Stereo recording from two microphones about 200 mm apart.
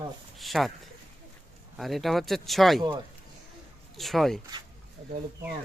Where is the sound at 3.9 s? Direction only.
Centre (ahead or behind).